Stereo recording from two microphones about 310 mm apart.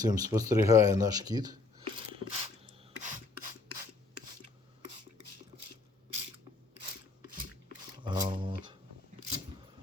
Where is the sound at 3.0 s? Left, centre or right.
Right.